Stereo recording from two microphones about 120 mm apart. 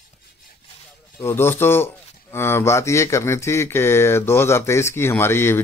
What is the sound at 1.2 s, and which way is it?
A man's voice, 20° left (ahead or behind).